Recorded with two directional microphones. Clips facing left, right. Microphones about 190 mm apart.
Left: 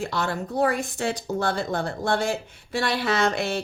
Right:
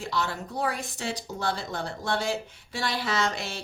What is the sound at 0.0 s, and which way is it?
A woman's voice, 50° left (ahead or behind).